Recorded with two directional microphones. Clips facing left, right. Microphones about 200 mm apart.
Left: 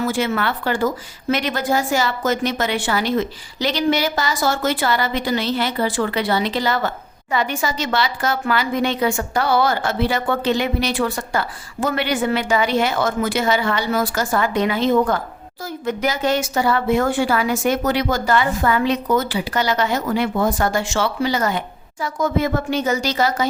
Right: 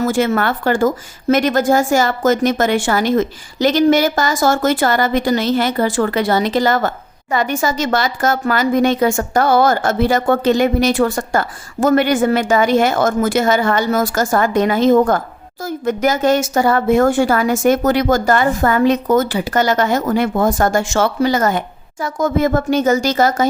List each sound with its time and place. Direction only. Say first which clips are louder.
0.0 s a woman's voice: right 5 dB; 45° right (ahead or behind)